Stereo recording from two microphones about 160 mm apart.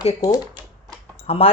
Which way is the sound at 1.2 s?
40° left (ahead or behind).